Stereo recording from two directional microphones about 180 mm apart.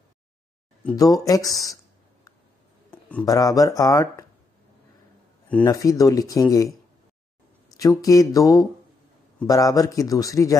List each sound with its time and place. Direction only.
0.9 s a man's voice: 20° left (ahead or behind)
2.9 s a sound: 5° left (ahead or behind)
3.3 s a man's voice: 20° left (ahead or behind)
5.6 s a man's voice: 20° left (ahead or behind)
7.7 s a man's voice: 20° left (ahead or behind)